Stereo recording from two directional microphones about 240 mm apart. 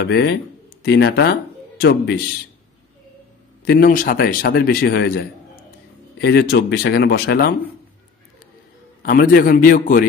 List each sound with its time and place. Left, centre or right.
0.0 s speech: left
3.6 s a man's voice: left
9.0 s a man's voice: left